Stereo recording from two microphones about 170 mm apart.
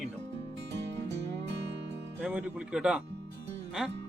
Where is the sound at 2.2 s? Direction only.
5° right (ahead or behind).